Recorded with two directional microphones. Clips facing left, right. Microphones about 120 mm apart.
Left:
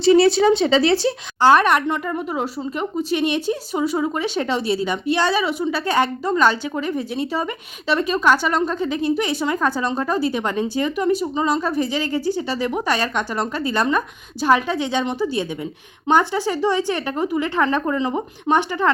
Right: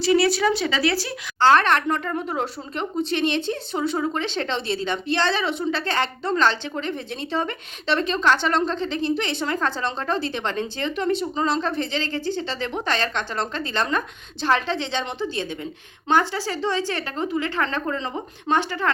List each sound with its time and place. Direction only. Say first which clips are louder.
0.0 s speech: left 6 dB; 25° left (ahead or behind)
1.4 s speech: left 2 dB; 15° left (ahead or behind)